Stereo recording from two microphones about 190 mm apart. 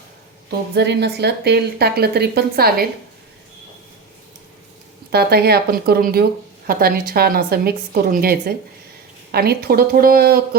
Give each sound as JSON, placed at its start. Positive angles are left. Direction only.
{"t": 0.7, "sound": "a woman's voice", "side_deg": -60}
{"t": 5.1, "sound": "a woman's voice", "side_deg": -55}